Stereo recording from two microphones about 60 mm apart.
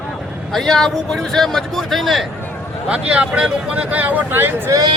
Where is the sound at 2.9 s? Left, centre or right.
Centre; by 4.7 s right.